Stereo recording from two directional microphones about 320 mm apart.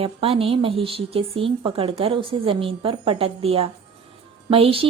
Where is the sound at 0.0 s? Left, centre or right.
Centre.